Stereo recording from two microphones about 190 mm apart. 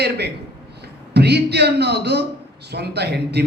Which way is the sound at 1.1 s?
60° right (ahead or behind).